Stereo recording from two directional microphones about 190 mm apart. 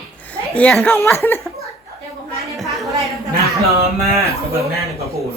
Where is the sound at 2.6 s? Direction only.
Centre (ahead or behind).